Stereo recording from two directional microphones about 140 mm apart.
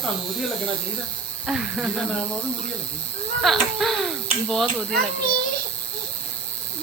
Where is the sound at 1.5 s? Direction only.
5° right (ahead or behind).